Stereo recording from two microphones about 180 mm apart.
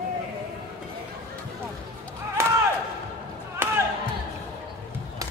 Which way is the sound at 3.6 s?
15° right (ahead or behind).